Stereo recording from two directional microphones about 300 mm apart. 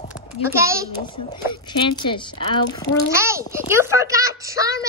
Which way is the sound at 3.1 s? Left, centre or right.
Centre.